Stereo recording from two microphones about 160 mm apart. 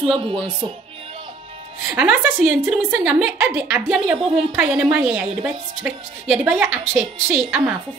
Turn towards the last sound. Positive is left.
turn(degrees=-5)  # may be behind; listen again after turning